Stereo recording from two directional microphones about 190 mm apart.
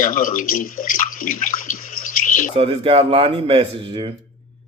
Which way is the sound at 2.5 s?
30° right (ahead or behind).